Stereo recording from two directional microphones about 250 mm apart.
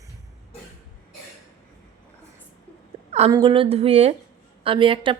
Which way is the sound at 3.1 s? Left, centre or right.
Right.